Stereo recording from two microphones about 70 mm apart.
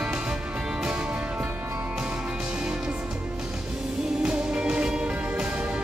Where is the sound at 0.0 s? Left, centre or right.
Centre.